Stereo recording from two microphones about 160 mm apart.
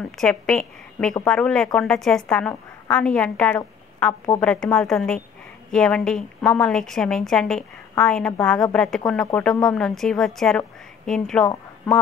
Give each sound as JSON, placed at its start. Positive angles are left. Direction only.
{"t": 0.2, "sound": "a woman's voice", "side_deg": 5}